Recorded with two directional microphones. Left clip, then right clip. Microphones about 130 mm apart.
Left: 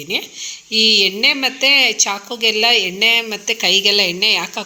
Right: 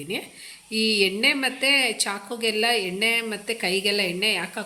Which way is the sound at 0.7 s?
15° left (ahead or behind).